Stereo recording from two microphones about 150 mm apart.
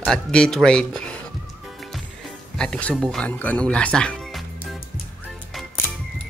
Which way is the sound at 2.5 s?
5° left (ahead or behind).